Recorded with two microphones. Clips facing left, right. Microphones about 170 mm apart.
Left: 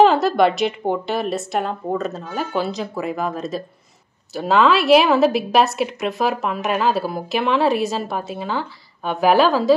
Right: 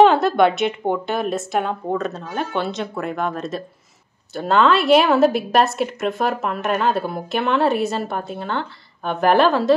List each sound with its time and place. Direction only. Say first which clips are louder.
0.0 s a woman's voice: right 1 dB; centre (ahead or behind)